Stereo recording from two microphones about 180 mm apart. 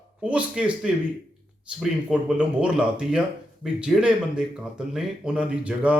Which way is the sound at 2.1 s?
5° right (ahead or behind).